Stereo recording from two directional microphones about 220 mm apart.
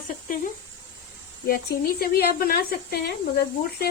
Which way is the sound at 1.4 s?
45° left (ahead or behind).